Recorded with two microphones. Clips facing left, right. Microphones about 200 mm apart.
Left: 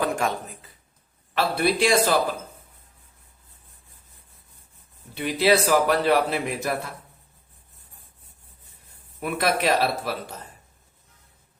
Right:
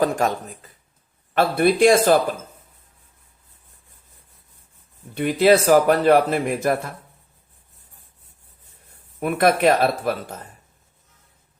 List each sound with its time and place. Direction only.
0.0 s a man's voice: 40° right (ahead or behind)
5.1 s a man's voice: 50° right (ahead or behind)
9.2 s a man's voice: 50° right (ahead or behind)